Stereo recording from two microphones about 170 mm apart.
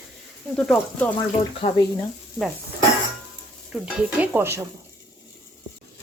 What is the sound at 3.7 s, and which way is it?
Stir, 10° right (ahead or behind).